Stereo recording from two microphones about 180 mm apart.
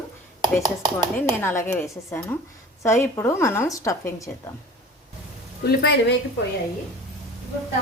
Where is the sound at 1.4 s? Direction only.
15° left (ahead or behind).